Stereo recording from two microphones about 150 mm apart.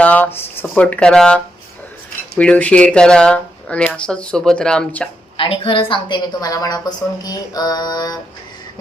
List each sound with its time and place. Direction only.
0.0 s a sound: 10° left (ahead or behind)
0.8 s speech: 10° left (ahead or behind)
5.4 s a woman's voice: 35° left (ahead or behind)